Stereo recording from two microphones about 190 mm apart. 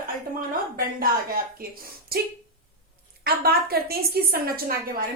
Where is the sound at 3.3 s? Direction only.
55° right (ahead or behind).